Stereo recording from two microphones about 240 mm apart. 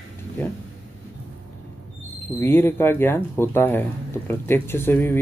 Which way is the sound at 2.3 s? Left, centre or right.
Centre.